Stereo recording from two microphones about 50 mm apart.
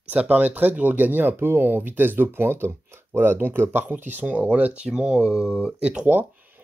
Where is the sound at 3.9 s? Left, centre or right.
Right.